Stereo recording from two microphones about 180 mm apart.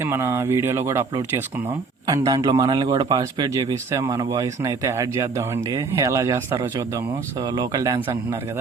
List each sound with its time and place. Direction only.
0.0 s a man's voice: 15° right (ahead or behind)